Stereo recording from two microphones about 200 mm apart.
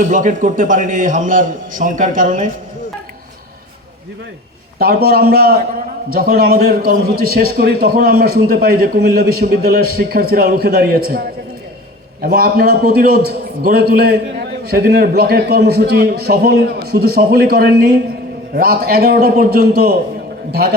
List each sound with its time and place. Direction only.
0.0 s a man's voice: 40° right (ahead or behind)
4.8 s a man's voice: 50° right (ahead or behind)
12.2 s a man's voice: 50° right (ahead or behind)